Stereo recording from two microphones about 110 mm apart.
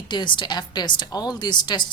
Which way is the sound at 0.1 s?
45° left (ahead or behind).